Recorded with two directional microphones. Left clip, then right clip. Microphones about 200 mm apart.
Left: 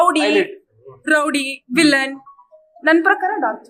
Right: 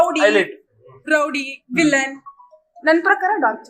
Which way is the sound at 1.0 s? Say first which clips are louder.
Left 2 dB; 45° left (ahead or behind).